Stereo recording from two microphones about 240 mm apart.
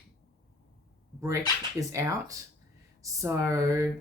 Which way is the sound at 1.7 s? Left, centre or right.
Centre.